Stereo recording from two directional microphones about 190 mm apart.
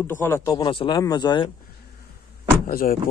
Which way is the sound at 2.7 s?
50° left (ahead or behind).